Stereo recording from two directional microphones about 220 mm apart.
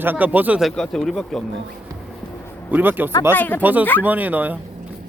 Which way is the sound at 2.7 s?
10° right (ahead or behind).